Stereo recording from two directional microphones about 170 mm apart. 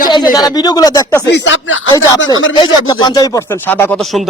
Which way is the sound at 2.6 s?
25° left (ahead or behind).